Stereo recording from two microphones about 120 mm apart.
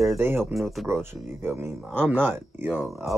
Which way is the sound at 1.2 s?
20° right (ahead or behind).